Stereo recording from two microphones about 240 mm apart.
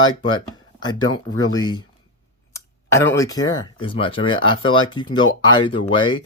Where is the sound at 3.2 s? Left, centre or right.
Centre.